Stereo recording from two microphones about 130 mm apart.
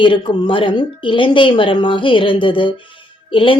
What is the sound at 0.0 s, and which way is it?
A woman's voice, 40° left (ahead or behind).